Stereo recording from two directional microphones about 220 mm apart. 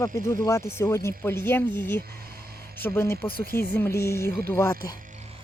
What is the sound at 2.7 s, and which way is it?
Speech, 10° left (ahead or behind).